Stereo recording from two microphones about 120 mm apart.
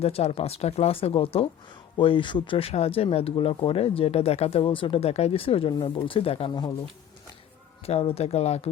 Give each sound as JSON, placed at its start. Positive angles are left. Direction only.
{"t": 0.0, "sound": "speech", "side_deg": 60}
{"t": 6.5, "sound": "speech", "side_deg": 35}
{"t": 7.8, "sound": "speech", "side_deg": 55}